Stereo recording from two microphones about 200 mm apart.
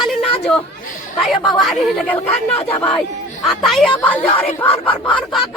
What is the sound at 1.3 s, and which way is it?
Speech, centre (ahead or behind).